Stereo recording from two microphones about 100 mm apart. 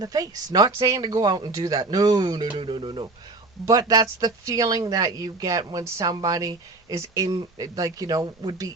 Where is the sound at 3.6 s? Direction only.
40° right (ahead or behind).